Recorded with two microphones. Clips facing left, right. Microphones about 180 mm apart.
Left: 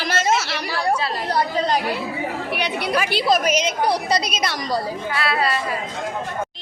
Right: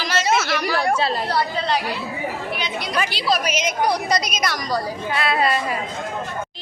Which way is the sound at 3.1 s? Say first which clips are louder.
Left 4 dB; 50° left (ahead or behind).